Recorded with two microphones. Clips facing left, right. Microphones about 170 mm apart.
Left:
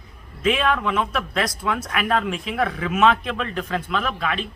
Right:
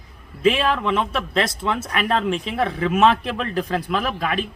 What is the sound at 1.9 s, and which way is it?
Speech, 5° left (ahead or behind).